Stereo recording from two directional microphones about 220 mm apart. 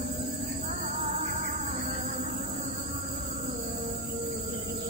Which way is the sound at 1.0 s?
25° right (ahead or behind).